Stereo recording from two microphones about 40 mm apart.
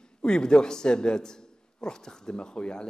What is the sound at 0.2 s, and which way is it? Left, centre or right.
A man's voice, left.